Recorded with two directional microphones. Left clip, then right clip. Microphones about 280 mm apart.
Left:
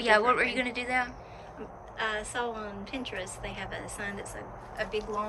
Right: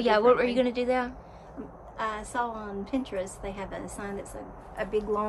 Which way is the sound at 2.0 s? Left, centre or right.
Centre.